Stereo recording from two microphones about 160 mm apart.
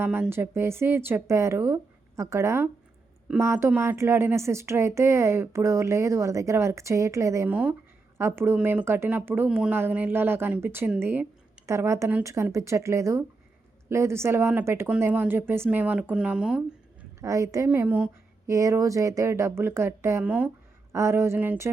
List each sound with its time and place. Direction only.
0.0 s speech: 15° right (ahead or behind)
17.2 s speech: 20° right (ahead or behind)